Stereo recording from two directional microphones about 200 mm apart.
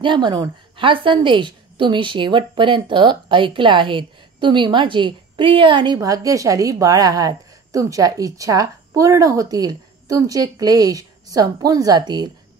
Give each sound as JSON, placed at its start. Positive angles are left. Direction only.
{"t": 0.0, "sound": "a woman's voice", "side_deg": -25}